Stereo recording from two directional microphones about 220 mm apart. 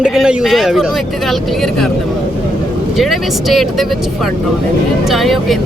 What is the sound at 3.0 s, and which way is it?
Speech, centre (ahead or behind).